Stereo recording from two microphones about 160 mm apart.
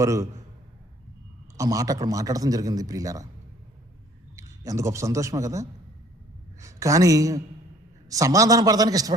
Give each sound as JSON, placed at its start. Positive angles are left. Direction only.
{"t": 0.0, "sound": "a man's voice", "side_deg": -20}
{"t": 1.5, "sound": "a man's voice", "side_deg": -20}
{"t": 4.4, "sound": "a man's voice", "side_deg": -20}